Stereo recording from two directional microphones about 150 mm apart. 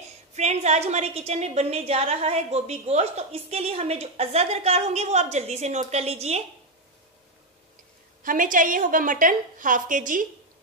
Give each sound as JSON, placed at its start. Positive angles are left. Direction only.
{"t": 0.3, "sound": "a woman's voice", "side_deg": -50}
{"t": 8.2, "sound": "a woman's voice", "side_deg": -65}